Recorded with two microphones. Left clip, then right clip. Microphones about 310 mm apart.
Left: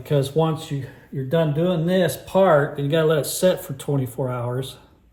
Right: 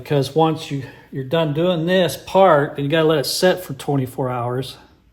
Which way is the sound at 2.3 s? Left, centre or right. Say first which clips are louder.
Right 4 dB; centre.